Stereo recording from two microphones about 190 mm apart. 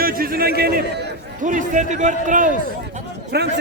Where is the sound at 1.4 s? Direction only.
40° right (ahead or behind).